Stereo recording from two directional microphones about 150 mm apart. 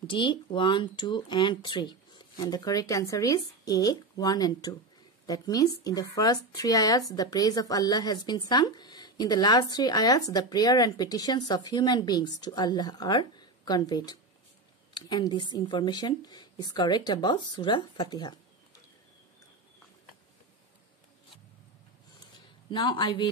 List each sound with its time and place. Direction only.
0.0 s speech: 35° left (ahead or behind)
22.7 s speech: 35° left (ahead or behind)